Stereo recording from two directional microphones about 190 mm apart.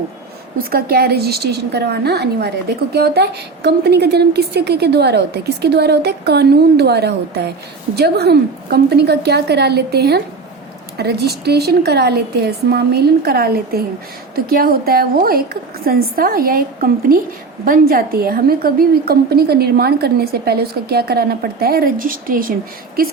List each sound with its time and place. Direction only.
0.6 s a woman's voice: 55° right (ahead or behind)